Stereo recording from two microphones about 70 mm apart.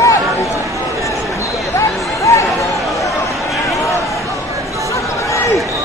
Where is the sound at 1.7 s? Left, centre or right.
Left.